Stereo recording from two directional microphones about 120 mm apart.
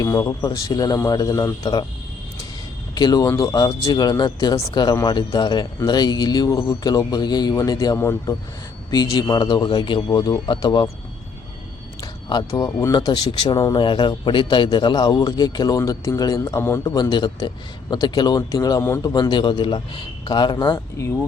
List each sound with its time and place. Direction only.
0.0 s speech: 25° left (ahead or behind)
2.9 s speech: 35° left (ahead or behind)
7.9 s speech: 20° left (ahead or behind)
9.2 s speech: 35° left (ahead or behind)
12.3 s speech: 30° left (ahead or behind)
18.8 s speech: 20° left (ahead or behind)
19.1 s speech: 40° left (ahead or behind)